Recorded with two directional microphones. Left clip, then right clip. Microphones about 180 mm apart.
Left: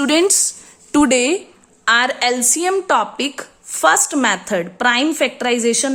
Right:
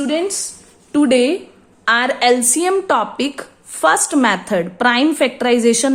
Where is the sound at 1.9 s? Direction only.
15° left (ahead or behind).